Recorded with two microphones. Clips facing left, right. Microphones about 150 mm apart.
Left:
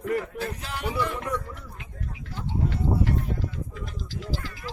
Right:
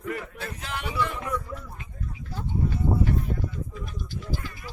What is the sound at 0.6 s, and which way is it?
Music, 40° left (ahead or behind).